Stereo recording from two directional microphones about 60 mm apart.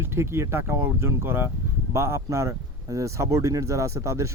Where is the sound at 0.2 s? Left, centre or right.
Right.